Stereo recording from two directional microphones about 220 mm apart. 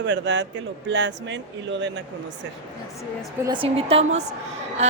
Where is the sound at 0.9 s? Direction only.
55° right (ahead or behind).